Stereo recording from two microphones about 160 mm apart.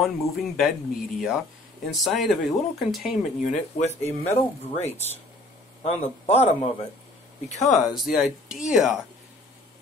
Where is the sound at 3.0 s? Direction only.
50° left (ahead or behind).